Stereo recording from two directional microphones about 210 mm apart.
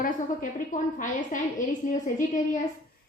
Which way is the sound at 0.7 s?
35° left (ahead or behind).